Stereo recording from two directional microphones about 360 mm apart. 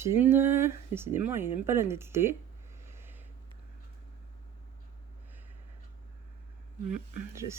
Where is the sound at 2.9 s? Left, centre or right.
Centre.